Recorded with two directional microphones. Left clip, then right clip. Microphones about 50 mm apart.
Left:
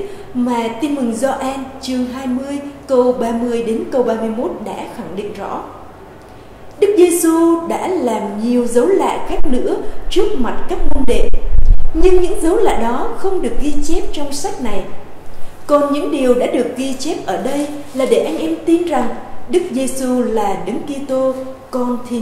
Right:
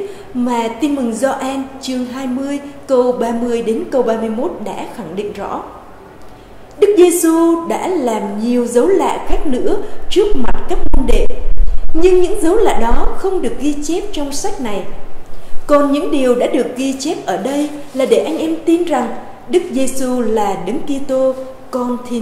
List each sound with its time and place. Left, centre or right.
0.5 s a woman's voice: right
6.8 s a sound: right
7.6 s a woman's voice: right
18.0 s a woman's voice: centre
18.7 s a woman's voice: right